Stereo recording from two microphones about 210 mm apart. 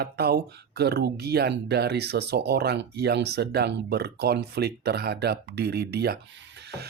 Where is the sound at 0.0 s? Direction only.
50° right (ahead or behind).